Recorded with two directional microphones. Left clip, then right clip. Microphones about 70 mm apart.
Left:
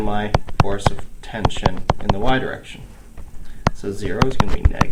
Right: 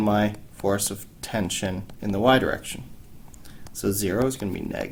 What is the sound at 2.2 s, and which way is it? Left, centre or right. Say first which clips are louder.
Speech: right 4 dB; right.